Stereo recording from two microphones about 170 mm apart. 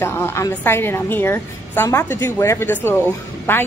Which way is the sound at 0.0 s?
15° left (ahead or behind).